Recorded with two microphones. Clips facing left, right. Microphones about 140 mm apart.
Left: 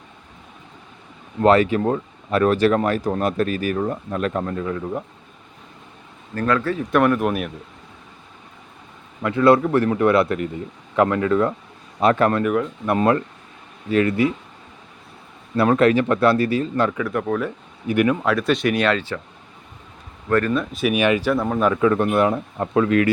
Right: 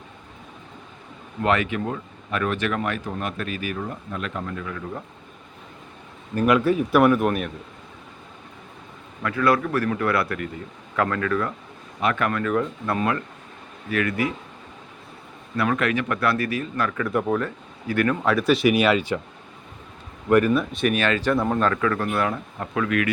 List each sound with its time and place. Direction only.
1.4 s speech: 35° left (ahead or behind)
6.3 s speech: 15° right (ahead or behind); by 7.5 s 5° left (ahead or behind)
9.2 s speech: 25° left (ahead or behind)
11.9 s speech: 35° left (ahead or behind)
15.5 s speech: 35° left (ahead or behind)
17.0 s speech: centre (ahead or behind)
17.8 s speech: 15° left (ahead or behind)
18.3 s speech: centre (ahead or behind)
20.3 s speech: 10° right (ahead or behind)
20.8 s speech: 15° left (ahead or behind)
21.3 s speech: centre (ahead or behind)
21.6 s speech: 20° left (ahead or behind)